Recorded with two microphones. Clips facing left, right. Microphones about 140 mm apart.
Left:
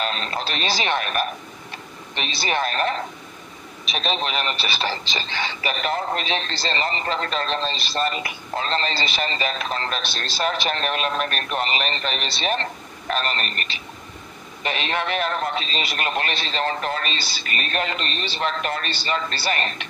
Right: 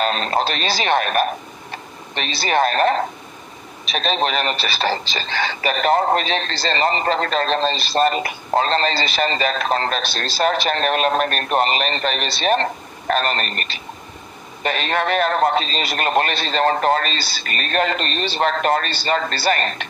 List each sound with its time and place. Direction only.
0.0 s speech: 40° right (ahead or behind)